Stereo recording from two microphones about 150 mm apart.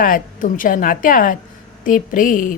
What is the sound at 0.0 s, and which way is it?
A woman's voice, 65° left (ahead or behind).